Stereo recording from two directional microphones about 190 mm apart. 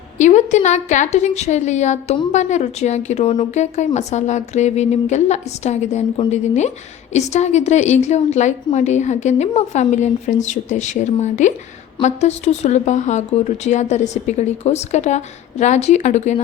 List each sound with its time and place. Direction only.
0.2 s a woman's voice: 40° left (ahead or behind)